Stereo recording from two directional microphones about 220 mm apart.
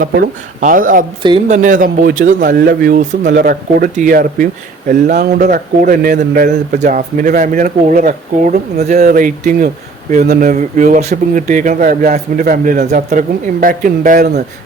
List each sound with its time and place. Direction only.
0.0 s speech: 40° right (ahead or behind)